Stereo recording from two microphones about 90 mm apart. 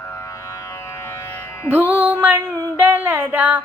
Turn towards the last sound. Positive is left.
turn(degrees=-25)  # may be behind; listen again after turning